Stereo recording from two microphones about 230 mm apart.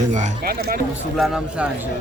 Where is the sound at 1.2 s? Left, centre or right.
Centre.